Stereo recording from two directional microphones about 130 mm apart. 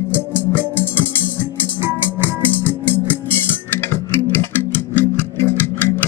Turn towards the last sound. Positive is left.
turn(degrees=15)  # may be behind; listen again after turning